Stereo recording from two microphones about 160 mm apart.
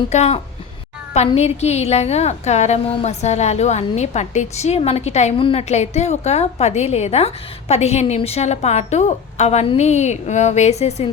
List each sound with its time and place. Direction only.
0.1 s a woman's voice: 40° left (ahead or behind)